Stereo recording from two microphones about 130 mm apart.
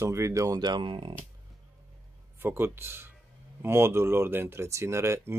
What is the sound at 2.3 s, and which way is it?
Speech, 15° right (ahead or behind).